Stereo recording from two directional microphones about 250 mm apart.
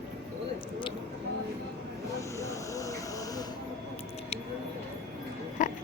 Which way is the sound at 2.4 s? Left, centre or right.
Centre.